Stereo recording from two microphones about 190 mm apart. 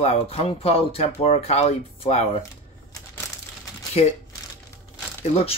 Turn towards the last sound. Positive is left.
turn(degrees=30)  # may be behind; listen again after turning